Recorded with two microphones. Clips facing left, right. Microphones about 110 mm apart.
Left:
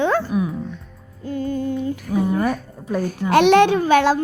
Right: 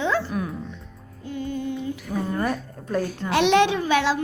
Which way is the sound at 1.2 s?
45° left (ahead or behind).